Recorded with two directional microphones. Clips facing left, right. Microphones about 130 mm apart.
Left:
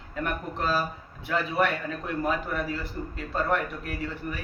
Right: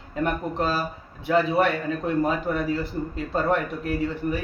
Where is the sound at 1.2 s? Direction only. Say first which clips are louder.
Right 5 dB; 25° right (ahead or behind).